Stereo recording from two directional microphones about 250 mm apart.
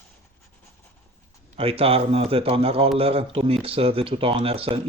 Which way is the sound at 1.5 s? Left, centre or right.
Right.